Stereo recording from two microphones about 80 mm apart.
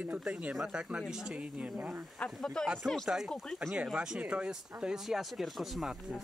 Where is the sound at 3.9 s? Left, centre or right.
Centre.